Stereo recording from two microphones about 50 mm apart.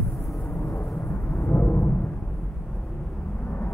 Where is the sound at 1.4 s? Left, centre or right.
Left.